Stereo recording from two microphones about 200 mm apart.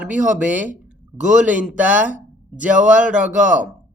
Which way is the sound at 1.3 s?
40° right (ahead or behind).